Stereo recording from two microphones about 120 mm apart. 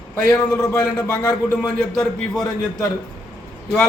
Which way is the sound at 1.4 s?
5° left (ahead or behind).